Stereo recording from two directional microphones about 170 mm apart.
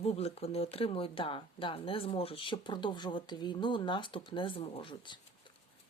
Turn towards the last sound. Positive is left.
turn(degrees=30)  # may be behind; listen again after turning